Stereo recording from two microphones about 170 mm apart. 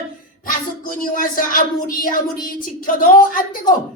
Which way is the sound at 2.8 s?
55° left (ahead or behind).